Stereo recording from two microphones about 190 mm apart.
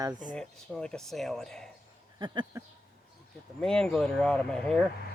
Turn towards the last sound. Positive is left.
turn(degrees=5)  # may be behind; listen again after turning